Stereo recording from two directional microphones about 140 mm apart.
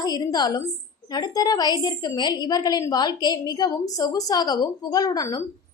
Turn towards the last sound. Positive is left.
turn(degrees=25)  # may be behind; listen again after turning